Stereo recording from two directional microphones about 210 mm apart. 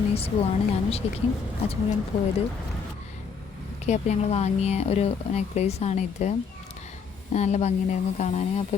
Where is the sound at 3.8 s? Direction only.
30° left (ahead or behind).